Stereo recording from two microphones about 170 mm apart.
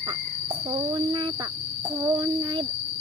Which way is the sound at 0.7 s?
25° right (ahead or behind).